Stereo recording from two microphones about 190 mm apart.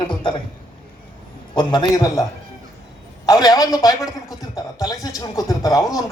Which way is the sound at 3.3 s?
20° left (ahead or behind).